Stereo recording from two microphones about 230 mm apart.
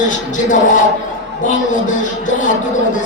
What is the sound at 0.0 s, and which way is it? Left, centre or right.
Speech, left.